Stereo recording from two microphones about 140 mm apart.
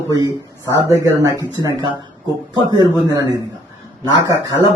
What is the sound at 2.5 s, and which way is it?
Speech, 35° right (ahead or behind).